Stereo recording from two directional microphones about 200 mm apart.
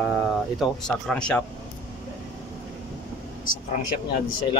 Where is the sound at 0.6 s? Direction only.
5° left (ahead or behind).